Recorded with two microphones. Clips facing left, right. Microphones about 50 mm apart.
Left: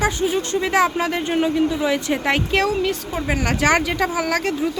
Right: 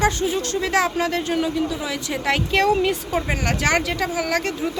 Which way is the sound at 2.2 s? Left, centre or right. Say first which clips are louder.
Left 1 dB; centre.